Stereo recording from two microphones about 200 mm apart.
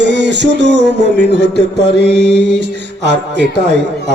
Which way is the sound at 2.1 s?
55° right (ahead or behind).